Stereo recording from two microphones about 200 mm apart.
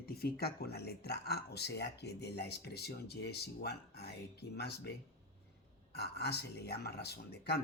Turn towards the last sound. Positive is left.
turn(degrees=55)  # may be behind; listen again after turning